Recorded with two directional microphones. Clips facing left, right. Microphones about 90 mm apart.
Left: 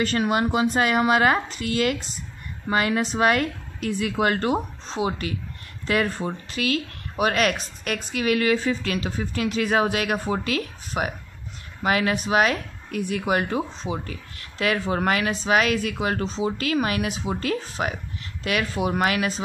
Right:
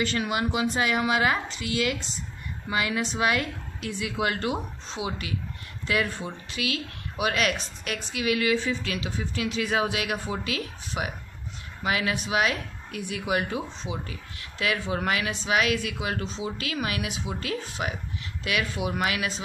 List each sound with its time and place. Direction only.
0.0 s speech: 45° left (ahead or behind)